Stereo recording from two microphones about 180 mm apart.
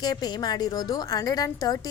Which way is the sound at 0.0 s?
25° left (ahead or behind).